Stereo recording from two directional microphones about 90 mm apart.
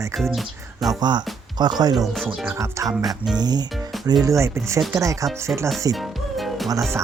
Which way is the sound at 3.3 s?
50° right (ahead or behind).